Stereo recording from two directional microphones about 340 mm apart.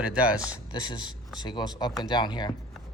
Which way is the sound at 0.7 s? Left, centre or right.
Centre.